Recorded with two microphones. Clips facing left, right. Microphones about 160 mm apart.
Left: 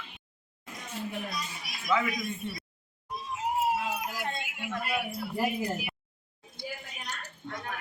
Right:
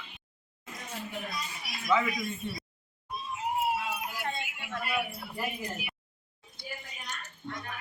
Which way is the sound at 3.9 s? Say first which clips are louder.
Left 2 dB; 40° left (ahead or behind).